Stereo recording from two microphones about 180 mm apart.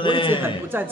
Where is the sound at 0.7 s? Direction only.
10° right (ahead or behind).